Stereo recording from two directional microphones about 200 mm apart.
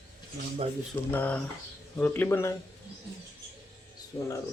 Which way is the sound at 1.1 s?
10° left (ahead or behind).